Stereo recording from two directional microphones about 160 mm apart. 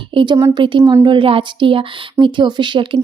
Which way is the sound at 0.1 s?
30° right (ahead or behind).